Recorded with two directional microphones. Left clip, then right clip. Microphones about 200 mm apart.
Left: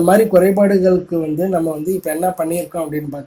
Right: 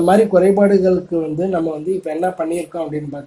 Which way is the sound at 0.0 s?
25° left (ahead or behind).